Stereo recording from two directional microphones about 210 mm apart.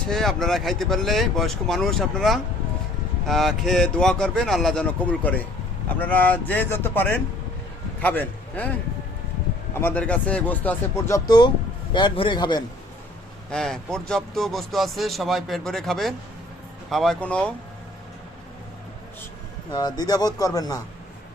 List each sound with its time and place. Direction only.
0.1 s a man's voice: centre (ahead or behind)
9.7 s a man's voice: 10° left (ahead or behind)
13.5 s speech: 5° left (ahead or behind)
19.7 s speech: 20° left (ahead or behind)